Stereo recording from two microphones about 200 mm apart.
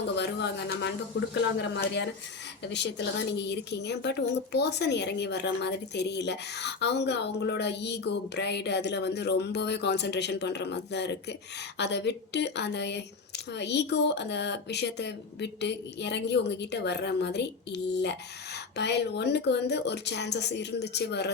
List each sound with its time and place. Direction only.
0.2 s speech: 60° left (ahead or behind)